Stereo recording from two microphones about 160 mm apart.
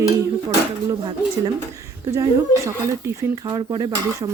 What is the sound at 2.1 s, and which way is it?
Speech, 20° right (ahead or behind).